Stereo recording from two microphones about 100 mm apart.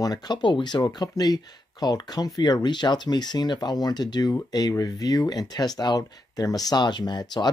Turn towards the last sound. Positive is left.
turn(degrees=45)  # may be behind; listen again after turning